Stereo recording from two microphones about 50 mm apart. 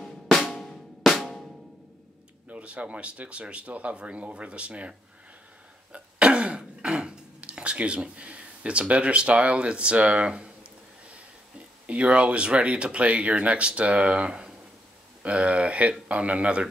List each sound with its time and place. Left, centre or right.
0.0 s drum: centre
2.5 s speech: right
5.9 s throat clearing: right
11.8 s speech: right